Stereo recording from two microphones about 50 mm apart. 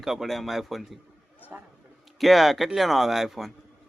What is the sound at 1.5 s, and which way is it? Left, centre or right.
Speech, right.